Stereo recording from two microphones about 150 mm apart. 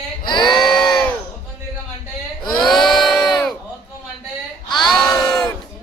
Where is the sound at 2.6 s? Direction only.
Centre (ahead or behind).